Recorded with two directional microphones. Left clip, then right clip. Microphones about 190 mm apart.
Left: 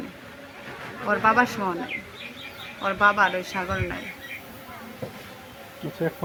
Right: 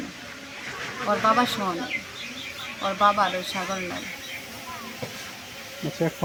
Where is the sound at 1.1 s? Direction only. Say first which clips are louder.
Left 1 dB; 15° left (ahead or behind).